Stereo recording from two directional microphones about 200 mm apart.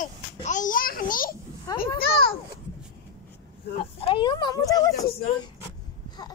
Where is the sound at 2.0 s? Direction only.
50° left (ahead or behind).